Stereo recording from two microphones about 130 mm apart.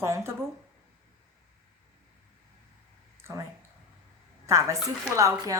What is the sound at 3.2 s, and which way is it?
Speech, 25° right (ahead or behind).